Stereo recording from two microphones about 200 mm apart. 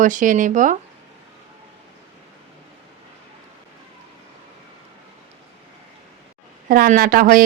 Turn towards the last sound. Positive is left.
turn(degrees=-45)  # may be behind; listen again after turning